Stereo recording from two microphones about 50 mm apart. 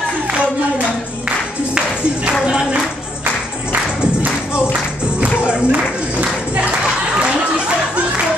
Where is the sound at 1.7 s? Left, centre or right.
Right.